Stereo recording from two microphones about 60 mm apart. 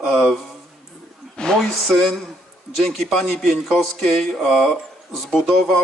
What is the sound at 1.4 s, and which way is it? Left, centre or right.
Speech, centre.